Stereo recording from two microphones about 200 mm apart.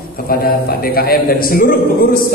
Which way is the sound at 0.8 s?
50° left (ahead or behind).